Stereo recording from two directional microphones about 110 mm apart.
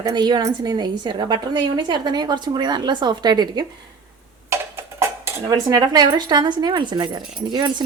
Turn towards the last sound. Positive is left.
turn(degrees=-45)  # may be behind; listen again after turning